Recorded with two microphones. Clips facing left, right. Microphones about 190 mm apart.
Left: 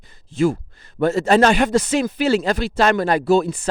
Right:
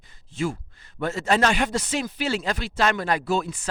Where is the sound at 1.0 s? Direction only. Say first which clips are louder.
Left 8 dB; 35° left (ahead or behind).